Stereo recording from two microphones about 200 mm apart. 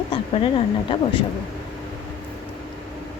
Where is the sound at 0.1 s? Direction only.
25° left (ahead or behind).